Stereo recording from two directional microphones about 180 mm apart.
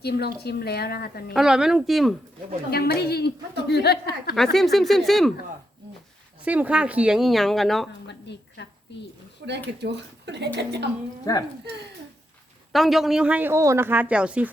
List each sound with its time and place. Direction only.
0.0 s a woman's voice: 65° left (ahead or behind)
1.3 s a woman's voice: 5° right (ahead or behind)
2.6 s a woman's voice: 65° left (ahead or behind)
4.5 s a woman's voice: centre (ahead or behind)
6.4 s a woman's voice: 10° right (ahead or behind)
8.0 s a woman's voice: 75° left (ahead or behind)
9.7 s speech: 70° right (ahead or behind)
11.3 s speech: 20° left (ahead or behind)
11.7 s a child's voice: 60° right (ahead or behind)
12.7 s speech: centre (ahead or behind)